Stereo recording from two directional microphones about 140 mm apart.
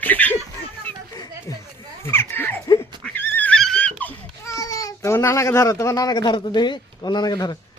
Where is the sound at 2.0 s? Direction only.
15° left (ahead or behind).